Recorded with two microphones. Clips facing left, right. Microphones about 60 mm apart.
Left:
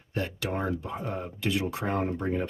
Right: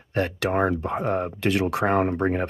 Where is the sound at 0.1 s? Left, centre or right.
Right.